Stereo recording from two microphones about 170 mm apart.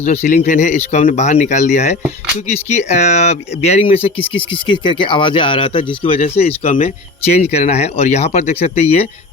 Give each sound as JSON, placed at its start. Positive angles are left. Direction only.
{"t": 0.0, "sound": "speech", "side_deg": 45}